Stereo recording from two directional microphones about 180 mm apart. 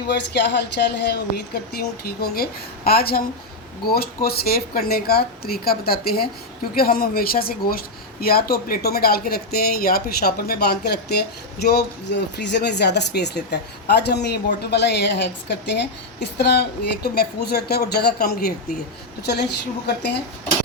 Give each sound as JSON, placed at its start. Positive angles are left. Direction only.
{"t": 0.1, "sound": "speech", "side_deg": 70}
{"t": 16.2, "sound": "speech", "side_deg": 65}